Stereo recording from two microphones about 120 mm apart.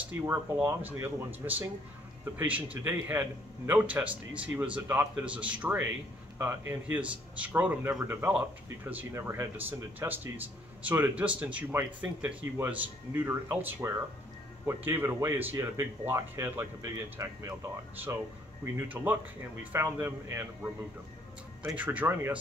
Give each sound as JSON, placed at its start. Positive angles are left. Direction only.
{"t": 0.0, "sound": "speech", "side_deg": -20}